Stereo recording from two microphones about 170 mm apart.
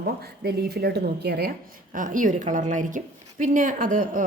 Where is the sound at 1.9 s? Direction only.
50° right (ahead or behind).